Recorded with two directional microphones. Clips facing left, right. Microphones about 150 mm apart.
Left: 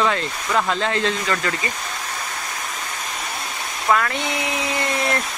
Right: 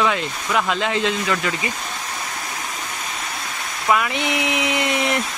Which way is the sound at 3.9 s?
15° right (ahead or behind).